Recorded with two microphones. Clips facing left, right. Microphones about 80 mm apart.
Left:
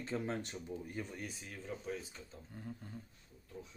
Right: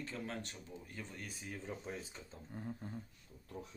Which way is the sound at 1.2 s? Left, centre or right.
Centre.